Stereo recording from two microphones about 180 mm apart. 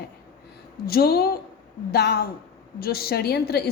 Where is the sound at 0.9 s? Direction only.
60° left (ahead or behind).